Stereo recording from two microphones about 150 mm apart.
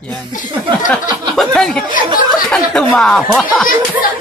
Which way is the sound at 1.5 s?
5° left (ahead or behind).